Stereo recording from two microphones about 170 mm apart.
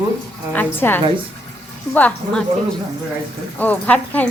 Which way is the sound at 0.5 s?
10° left (ahead or behind).